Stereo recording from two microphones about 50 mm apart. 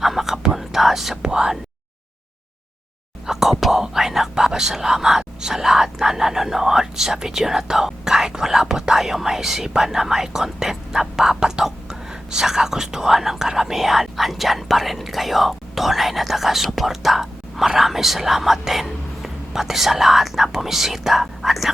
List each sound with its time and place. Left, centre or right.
0.0 s whispering: centre
1.2 s speech: centre
3.2 s speech: centre